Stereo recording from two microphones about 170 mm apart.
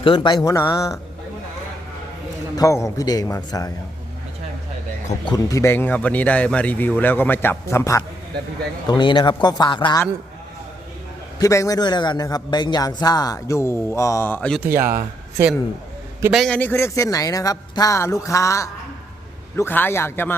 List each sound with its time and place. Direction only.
0.0 s a man's voice: 30° left (ahead or behind)
2.6 s a man's voice: 20° left (ahead or behind)
5.2 s speech: 20° left (ahead or behind)
8.9 s a man's voice: 25° left (ahead or behind)
11.3 s a man's voice: 20° left (ahead or behind)
14.6 s speech: 15° right (ahead or behind)
16.3 s speech: 5° left (ahead or behind)